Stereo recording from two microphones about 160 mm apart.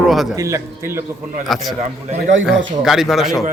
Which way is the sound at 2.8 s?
Centre (ahead or behind).